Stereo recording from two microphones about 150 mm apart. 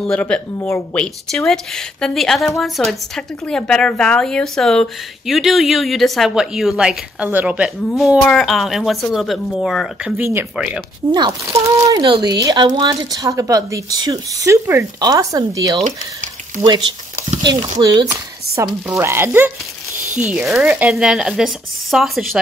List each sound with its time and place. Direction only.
0.0 s speech: 5° left (ahead or behind)
10.1 s speech: 15° right (ahead or behind)
11.1 s a woman's voice: 30° right (ahead or behind)
20.2 s speech: 5° right (ahead or behind)